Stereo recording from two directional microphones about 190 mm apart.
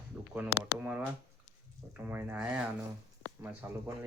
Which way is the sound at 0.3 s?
10° right (ahead or behind).